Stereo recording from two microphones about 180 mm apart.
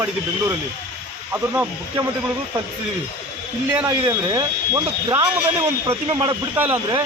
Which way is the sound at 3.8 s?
20° right (ahead or behind).